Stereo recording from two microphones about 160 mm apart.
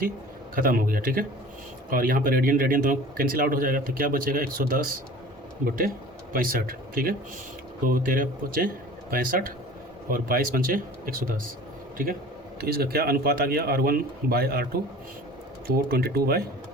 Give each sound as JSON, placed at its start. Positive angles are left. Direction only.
{"t": 0.5, "sound": "speech", "side_deg": -60}
{"t": 12.5, "sound": "speech", "side_deg": -75}